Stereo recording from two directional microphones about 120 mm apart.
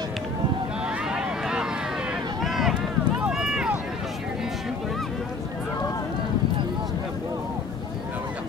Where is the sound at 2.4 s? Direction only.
Centre (ahead or behind).